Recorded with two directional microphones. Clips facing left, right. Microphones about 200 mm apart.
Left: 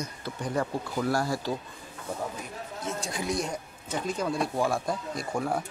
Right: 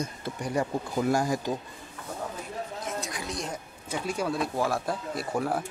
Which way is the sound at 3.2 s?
10° left (ahead or behind).